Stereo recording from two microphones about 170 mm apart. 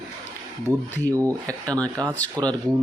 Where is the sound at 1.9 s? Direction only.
20° right (ahead or behind).